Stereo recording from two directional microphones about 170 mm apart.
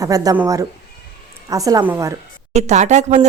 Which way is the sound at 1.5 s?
20° right (ahead or behind).